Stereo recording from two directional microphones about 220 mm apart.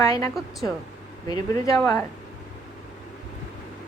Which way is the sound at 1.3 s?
15° left (ahead or behind).